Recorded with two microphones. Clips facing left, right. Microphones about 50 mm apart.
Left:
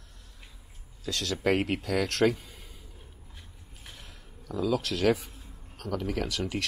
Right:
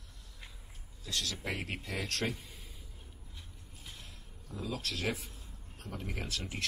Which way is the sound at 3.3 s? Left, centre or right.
Left.